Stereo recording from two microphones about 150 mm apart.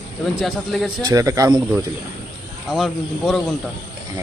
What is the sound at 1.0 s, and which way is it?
Speech, 25° right (ahead or behind).